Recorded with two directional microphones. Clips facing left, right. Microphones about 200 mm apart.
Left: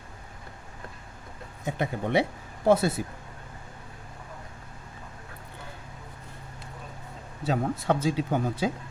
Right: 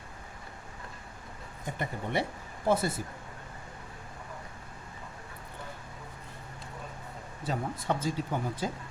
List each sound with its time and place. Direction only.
1.6 s speech: 75° left (ahead or behind)
7.4 s speech: 80° left